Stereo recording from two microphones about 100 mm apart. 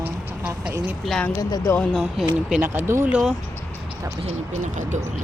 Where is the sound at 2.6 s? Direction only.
25° right (ahead or behind).